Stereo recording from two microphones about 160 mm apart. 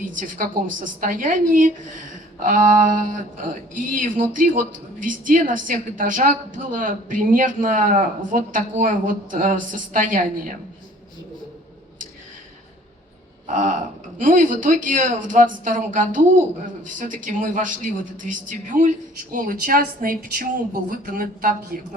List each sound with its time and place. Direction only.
0.0 s a woman's voice: 60° right (ahead or behind)
13.5 s a woman's voice: 50° right (ahead or behind)